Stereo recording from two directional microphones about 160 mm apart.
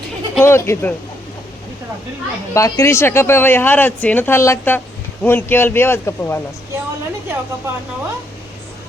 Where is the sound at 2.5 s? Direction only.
20° left (ahead or behind).